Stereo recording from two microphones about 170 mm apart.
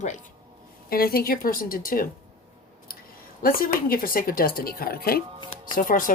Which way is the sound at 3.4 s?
55° left (ahead or behind).